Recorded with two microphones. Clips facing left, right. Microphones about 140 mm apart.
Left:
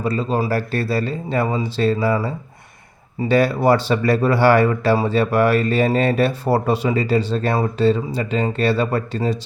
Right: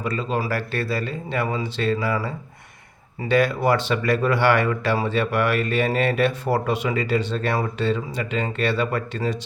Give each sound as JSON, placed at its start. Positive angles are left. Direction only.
{"t": 0.0, "sound": "speech", "side_deg": 35}